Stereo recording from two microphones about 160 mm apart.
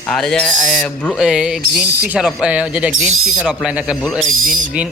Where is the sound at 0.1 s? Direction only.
5° left (ahead or behind).